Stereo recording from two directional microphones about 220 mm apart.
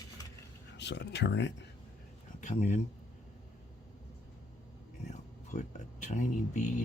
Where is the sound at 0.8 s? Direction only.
50° left (ahead or behind).